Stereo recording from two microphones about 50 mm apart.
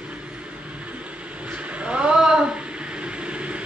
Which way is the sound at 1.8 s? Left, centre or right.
Right.